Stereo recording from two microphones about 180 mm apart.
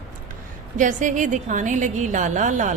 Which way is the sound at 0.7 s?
45° right (ahead or behind).